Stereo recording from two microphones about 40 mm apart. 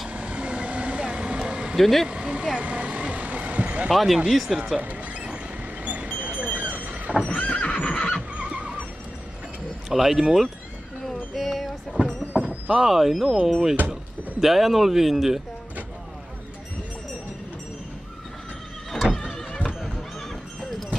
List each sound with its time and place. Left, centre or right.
0.1 s vehicle: right
1.8 s speech: centre
2.0 s vehicle: right
3.9 s speech: centre
4.7 s horse: right
5.9 s a sound: right
6.5 s vehicle: right
7.2 s horse: left
8.4 s neigh: right
9.8 s speech: centre
11.3 s a sound: centre
12.1 s clip-clop: right
12.7 s speech: centre
18.9 s music: centre